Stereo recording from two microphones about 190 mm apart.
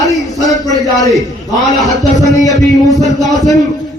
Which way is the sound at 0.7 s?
Centre (ahead or behind).